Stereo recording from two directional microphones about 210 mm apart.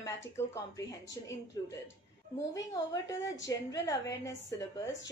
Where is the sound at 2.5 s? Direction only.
15° left (ahead or behind).